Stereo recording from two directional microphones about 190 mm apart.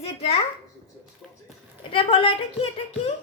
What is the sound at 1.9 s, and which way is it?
Speech, 30° left (ahead or behind).